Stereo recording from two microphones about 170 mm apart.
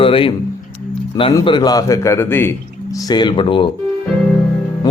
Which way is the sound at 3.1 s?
25° left (ahead or behind).